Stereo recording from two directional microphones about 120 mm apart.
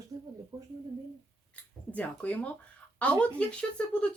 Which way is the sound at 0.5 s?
25° right (ahead or behind).